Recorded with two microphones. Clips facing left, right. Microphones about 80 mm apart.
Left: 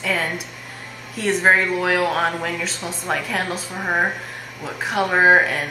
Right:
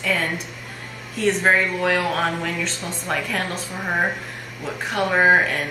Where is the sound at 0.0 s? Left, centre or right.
Centre.